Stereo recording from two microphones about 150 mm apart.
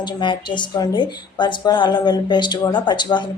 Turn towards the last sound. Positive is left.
turn(degrees=30)  # may be behind; listen again after turning